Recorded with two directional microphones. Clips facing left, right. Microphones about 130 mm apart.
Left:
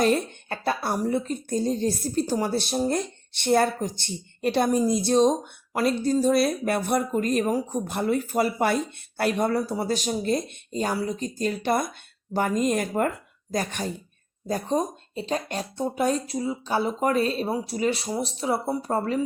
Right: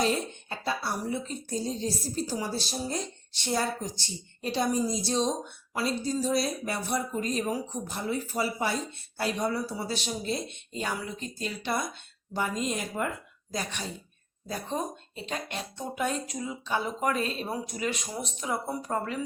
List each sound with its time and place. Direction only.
0.0 s a woman's voice: 60° left (ahead or behind); by 19.2 s 35° left (ahead or behind)